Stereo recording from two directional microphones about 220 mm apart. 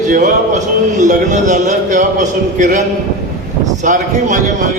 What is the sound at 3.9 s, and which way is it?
Speech, 35° right (ahead or behind).